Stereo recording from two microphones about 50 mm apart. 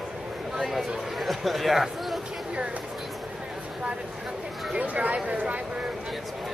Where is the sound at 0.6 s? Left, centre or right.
Centre.